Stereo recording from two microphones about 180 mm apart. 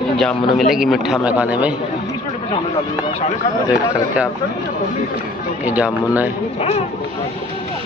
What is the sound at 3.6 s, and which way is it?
Speech, 5° right (ahead or behind).